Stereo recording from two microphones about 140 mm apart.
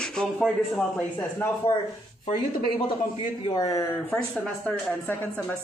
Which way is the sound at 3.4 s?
30° left (ahead or behind).